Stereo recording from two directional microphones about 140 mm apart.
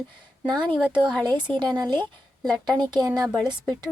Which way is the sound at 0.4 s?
35° right (ahead or behind).